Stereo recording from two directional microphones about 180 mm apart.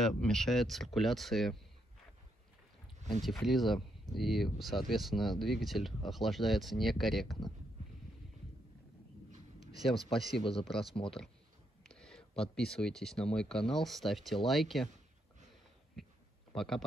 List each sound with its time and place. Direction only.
0.0 s speech: centre (ahead or behind)
3.2 s speech: centre (ahead or behind)
9.8 s speech: centre (ahead or behind)
10.4 s speech: 30° left (ahead or behind)
11.9 s speech: 5° left (ahead or behind)
16.5 s speech: centre (ahead or behind)